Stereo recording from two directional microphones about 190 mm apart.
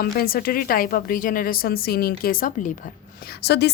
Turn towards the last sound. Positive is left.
turn(degrees=60)  # may be behind; listen again after turning